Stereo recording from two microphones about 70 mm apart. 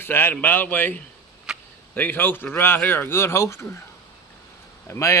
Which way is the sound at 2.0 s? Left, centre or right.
Left.